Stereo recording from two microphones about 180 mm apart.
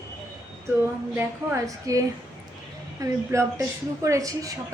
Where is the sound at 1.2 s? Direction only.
15° right (ahead or behind).